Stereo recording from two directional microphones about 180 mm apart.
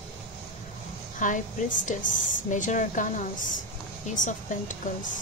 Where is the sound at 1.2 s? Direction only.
45° left (ahead or behind).